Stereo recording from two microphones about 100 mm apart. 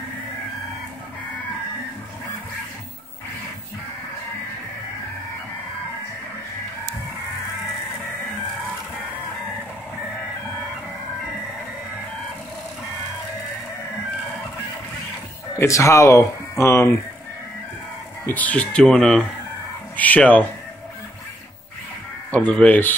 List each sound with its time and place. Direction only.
15.6 s speech: 30° left (ahead or behind)
18.2 s speech: 15° left (ahead or behind)
22.3 s speech: 15° left (ahead or behind)